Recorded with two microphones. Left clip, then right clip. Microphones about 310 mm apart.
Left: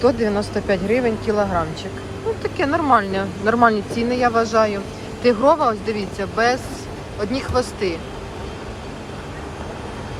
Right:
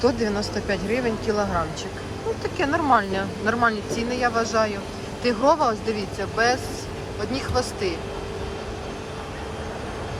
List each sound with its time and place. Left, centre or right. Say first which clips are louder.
0.0 s speech: left 4 dB; centre